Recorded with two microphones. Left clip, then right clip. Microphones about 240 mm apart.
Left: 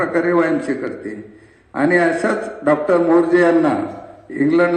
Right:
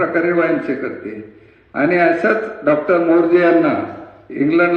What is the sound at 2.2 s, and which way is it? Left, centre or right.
A man's voice, left.